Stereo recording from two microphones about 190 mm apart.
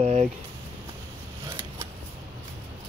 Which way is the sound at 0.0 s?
35° right (ahead or behind).